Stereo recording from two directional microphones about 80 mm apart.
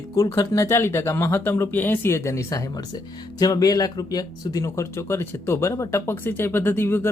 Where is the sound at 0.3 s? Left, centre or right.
Left.